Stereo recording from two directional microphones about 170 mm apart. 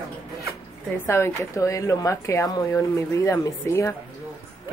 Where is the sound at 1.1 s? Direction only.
15° left (ahead or behind).